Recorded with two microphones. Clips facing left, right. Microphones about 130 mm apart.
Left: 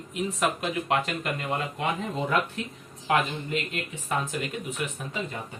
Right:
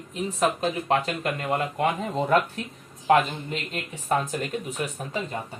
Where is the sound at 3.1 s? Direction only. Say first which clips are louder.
Right 5 dB; 40° right (ahead or behind).